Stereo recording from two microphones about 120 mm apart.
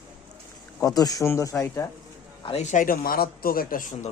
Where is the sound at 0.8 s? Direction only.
30° left (ahead or behind).